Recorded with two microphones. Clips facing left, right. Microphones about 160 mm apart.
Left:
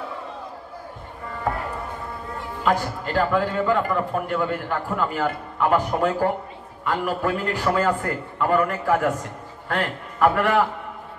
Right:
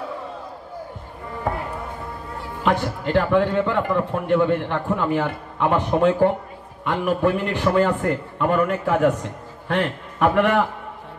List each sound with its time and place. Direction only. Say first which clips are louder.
2.6 s a man's voice: right 2 dB; 20° right (ahead or behind)